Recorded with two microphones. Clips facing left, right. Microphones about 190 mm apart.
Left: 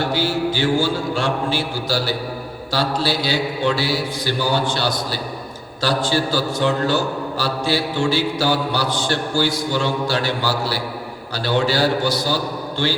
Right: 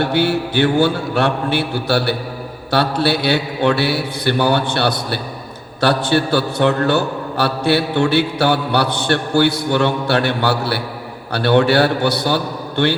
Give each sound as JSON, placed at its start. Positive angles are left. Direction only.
{"t": 0.0, "sound": "mantra", "side_deg": -60}